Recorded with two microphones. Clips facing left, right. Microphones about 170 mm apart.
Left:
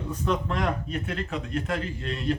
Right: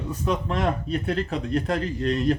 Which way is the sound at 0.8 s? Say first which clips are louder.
Right 6 dB; 35° right (ahead or behind).